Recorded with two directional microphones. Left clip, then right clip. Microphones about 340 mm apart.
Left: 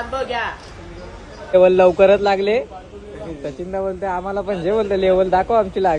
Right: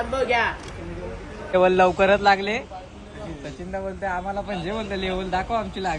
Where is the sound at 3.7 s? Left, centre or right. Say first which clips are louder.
Left 5 dB; right.